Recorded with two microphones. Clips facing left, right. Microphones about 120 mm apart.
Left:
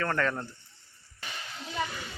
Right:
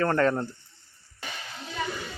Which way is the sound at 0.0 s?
35° right (ahead or behind).